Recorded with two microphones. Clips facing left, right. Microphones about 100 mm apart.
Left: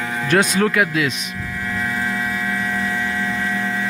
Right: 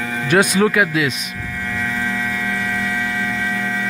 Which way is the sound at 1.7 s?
5° left (ahead or behind).